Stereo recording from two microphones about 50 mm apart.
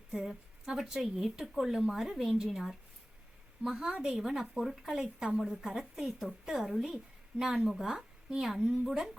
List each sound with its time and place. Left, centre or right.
0.1 s a woman's voice: centre
3.8 s speech: centre
4.2 s a woman's voice: centre